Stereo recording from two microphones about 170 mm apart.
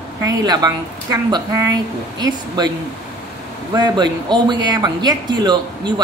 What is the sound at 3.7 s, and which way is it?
Speech, 25° right (ahead or behind).